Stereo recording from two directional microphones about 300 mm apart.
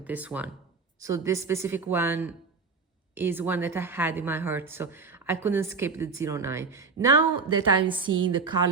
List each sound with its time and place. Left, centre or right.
0.0 s a woman's voice: centre